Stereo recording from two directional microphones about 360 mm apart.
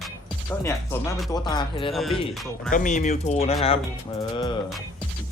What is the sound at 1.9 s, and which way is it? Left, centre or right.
Speech, centre.